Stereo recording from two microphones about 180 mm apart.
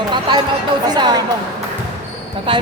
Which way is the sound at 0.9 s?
25° right (ahead or behind).